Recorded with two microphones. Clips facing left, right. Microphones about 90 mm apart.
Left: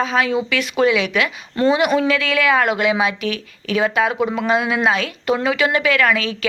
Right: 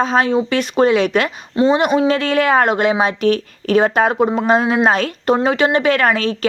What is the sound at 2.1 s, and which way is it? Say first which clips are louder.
A woman's voice: right 3 dB; 40° right (ahead or behind).